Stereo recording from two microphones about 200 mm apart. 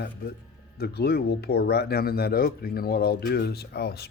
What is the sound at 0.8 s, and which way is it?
Speech, 50° left (ahead or behind).